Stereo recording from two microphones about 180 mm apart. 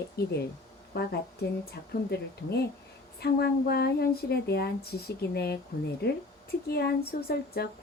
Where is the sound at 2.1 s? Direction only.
65° left (ahead or behind).